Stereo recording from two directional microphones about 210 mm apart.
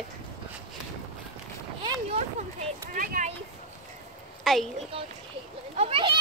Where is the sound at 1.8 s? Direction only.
20° right (ahead or behind).